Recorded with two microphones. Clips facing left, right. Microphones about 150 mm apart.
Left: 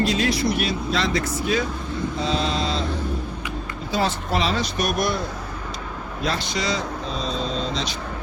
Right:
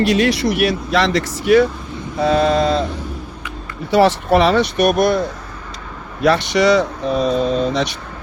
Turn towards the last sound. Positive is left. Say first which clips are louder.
# right 9 dB
turn(degrees=-60)  # may be behind; listen again after turning